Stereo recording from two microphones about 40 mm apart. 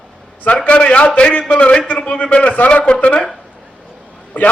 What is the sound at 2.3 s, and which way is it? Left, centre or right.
Speech, left.